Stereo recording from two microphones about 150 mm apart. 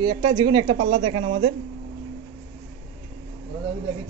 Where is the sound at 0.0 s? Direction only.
30° right (ahead or behind).